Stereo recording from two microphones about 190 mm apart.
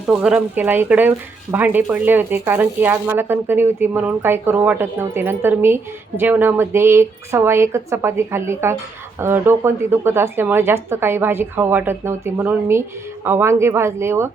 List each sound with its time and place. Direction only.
0.1 s speech: 5° right (ahead or behind)